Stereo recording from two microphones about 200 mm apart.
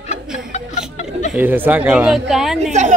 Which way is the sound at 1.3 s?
10° right (ahead or behind).